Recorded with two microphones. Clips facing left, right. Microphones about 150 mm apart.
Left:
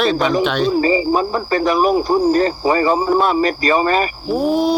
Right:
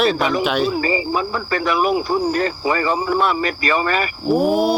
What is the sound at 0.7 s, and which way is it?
Speech, 35° left (ahead or behind).